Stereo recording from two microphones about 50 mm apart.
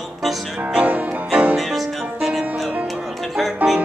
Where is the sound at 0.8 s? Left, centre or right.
Right.